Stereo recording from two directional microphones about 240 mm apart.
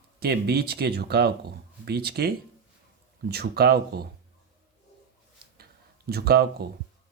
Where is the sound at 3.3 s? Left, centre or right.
Right.